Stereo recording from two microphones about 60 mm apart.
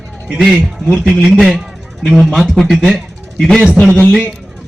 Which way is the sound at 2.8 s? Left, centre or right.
Centre.